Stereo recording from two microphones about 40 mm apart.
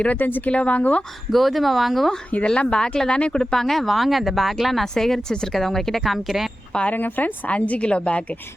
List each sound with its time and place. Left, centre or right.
0.2 s speech: left
0.5 s a woman's voice: left
1.3 s speech: centre
2.5 s speech: left; by 6.5 s centre
6.9 s speech: left
7.5 s a woman's voice: left